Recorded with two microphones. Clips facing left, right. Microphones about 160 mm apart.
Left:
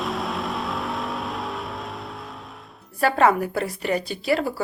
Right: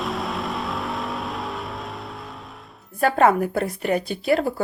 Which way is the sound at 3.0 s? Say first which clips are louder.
Right 1 dB; 50° right (ahead or behind).